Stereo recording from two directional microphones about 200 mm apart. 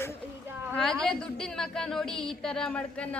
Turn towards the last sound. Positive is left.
turn(degrees=5)  # may be behind; listen again after turning